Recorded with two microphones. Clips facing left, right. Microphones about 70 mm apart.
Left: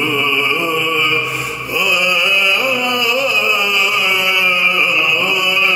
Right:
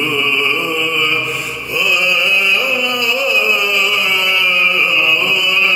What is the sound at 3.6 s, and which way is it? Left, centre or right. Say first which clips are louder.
Chant: even; centre.